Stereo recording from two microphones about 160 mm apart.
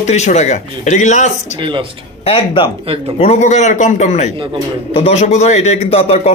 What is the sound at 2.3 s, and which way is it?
Speech, 30° left (ahead or behind).